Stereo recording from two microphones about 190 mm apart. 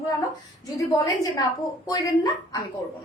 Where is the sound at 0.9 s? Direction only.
15° left (ahead or behind).